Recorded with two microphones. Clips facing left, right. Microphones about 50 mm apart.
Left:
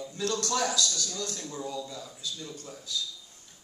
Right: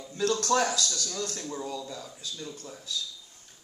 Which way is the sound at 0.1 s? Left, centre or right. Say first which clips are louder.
Right 5 dB; right.